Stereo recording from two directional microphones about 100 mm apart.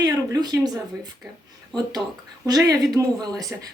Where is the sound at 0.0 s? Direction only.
40° right (ahead or behind).